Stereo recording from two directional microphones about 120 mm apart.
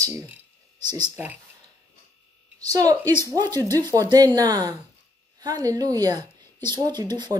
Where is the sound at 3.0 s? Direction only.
20° left (ahead or behind).